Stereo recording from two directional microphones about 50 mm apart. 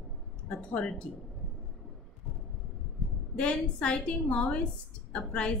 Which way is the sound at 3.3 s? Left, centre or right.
Centre.